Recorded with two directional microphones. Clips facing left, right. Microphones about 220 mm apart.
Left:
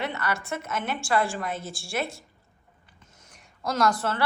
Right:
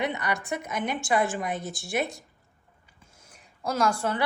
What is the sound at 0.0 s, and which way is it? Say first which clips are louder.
A woman's voice: right 1 dB; 15° right (ahead or behind).